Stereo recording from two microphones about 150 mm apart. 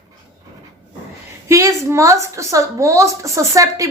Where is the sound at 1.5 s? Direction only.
20° right (ahead or behind).